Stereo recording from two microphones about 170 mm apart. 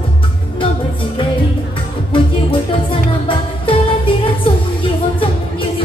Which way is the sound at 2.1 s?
30° left (ahead or behind).